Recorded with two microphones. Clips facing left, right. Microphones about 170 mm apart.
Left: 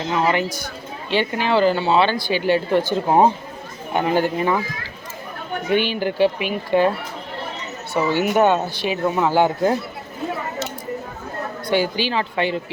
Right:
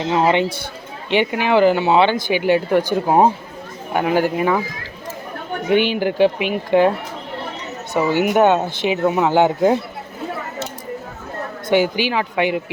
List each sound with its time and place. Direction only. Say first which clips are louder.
0.0 s speech: right 4 dB; 25° right (ahead or behind)
1.1 s speech: right 3 dB; 15° right (ahead or behind)
5.6 s speech: right 3 dB; 15° right (ahead or behind)
7.9 s speech: right 2 dB; 15° right (ahead or behind)
11.7 s speech: right 3 dB; 15° right (ahead or behind)